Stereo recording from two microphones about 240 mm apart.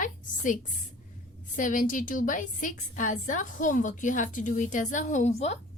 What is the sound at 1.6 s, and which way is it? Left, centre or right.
A woman's voice, left.